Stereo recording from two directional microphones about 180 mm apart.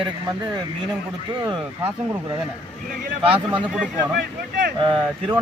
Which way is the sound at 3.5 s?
5° right (ahead or behind).